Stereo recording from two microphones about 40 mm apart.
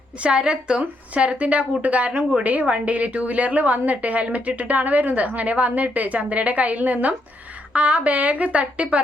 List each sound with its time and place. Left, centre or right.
0.2 s a woman's voice: right